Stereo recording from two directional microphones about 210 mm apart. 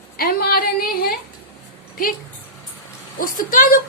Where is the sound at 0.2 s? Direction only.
45° left (ahead or behind).